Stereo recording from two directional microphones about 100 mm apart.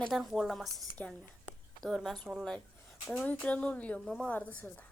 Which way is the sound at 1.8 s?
Centre (ahead or behind).